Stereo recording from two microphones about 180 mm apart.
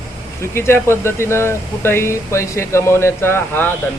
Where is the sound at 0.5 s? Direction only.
15° left (ahead or behind).